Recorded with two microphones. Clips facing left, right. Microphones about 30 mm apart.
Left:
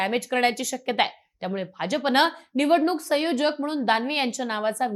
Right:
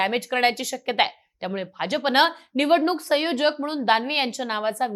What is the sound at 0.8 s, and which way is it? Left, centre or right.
A woman's voice, right.